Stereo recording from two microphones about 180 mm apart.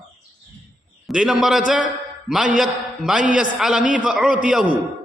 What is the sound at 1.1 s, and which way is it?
A man's voice, 5° right (ahead or behind).